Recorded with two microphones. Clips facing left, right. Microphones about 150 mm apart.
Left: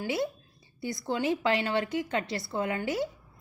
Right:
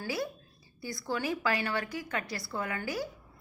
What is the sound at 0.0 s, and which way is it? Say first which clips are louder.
A woman's voice: left 4 dB; 25° left (ahead or behind).